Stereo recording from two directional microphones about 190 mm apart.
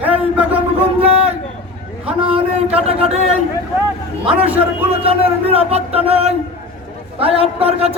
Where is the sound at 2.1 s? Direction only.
30° right (ahead or behind).